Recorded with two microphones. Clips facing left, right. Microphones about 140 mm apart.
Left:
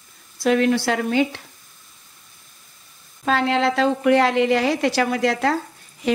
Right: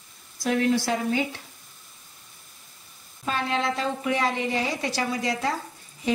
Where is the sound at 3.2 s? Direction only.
90° left.